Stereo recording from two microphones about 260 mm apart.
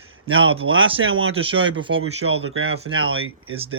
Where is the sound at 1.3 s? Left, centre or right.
Right.